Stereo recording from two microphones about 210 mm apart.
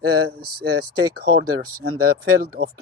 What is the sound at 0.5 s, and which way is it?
Speech, 90° right.